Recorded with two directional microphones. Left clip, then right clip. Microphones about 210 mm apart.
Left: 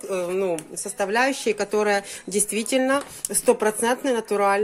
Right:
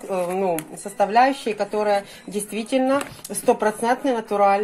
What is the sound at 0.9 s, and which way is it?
A woman's voice, 45° left (ahead or behind).